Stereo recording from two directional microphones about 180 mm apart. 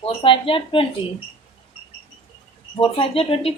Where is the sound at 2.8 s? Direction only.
30° left (ahead or behind).